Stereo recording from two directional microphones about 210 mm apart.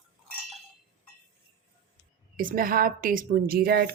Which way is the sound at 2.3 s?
40° right (ahead or behind).